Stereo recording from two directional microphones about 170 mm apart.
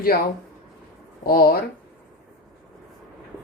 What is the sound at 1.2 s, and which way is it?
Speech, 60° left (ahead or behind).